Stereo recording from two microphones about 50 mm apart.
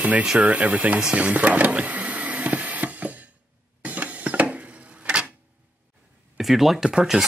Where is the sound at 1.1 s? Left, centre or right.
Right.